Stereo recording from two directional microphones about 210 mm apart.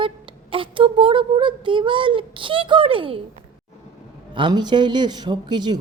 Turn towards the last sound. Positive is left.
turn(degrees=-20)  # may be behind; listen again after turning